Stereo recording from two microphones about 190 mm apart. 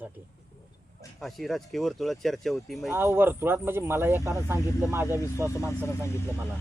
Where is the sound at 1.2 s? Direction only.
Centre (ahead or behind).